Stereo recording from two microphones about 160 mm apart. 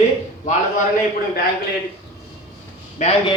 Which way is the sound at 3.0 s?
45° left (ahead or behind).